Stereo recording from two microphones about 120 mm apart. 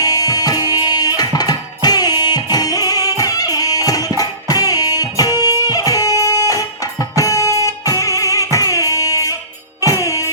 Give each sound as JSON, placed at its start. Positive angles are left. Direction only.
{"t": 0.0, "sound": "music", "side_deg": 30}